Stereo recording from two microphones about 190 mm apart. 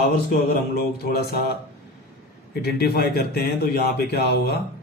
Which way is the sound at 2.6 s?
55° left (ahead or behind).